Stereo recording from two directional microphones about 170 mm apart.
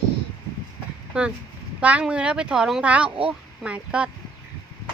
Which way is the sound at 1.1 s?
5° right (ahead or behind).